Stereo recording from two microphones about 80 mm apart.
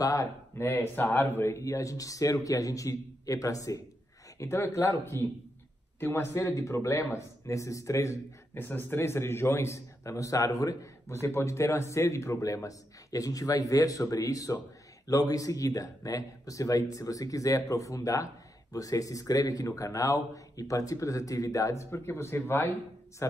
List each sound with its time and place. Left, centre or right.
0.0 s speech: left
0.6 s a man's voice: left
8.5 s a man's voice: left
11.1 s speech: left